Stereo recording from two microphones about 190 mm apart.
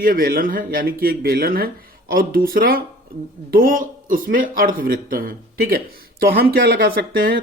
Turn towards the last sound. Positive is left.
turn(degrees=-50)  # may be behind; listen again after turning